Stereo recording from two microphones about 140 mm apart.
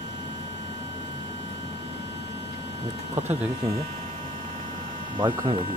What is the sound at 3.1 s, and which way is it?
Speech, 15° right (ahead or behind).